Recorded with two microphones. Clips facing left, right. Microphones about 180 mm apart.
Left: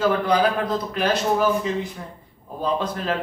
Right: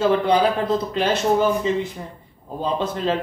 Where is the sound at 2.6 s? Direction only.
25° right (ahead or behind).